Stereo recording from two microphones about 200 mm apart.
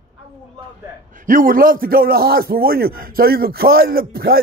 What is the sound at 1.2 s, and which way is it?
A man's voice, 45° right (ahead or behind).